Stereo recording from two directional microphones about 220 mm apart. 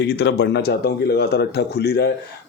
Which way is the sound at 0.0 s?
50° left (ahead or behind).